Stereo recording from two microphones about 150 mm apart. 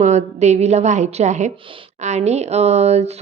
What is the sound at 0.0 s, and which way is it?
Speech, 50° right (ahead or behind).